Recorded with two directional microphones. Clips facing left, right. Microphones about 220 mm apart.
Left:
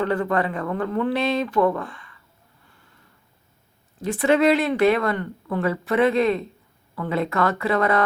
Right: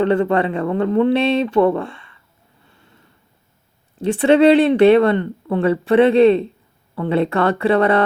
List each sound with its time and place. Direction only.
0.0 s speech: 25° right (ahead or behind)
3.9 s speech: 30° right (ahead or behind)